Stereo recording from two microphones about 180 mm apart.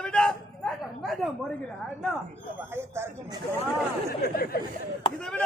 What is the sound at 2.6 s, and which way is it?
Speech, 15° right (ahead or behind).